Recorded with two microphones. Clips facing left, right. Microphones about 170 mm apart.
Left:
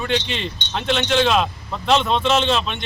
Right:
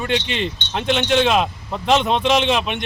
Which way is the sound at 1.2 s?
10° right (ahead or behind).